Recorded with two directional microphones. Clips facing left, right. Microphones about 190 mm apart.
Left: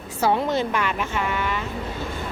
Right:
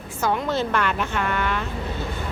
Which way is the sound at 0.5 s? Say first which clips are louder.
Even; 10° left (ahead or behind).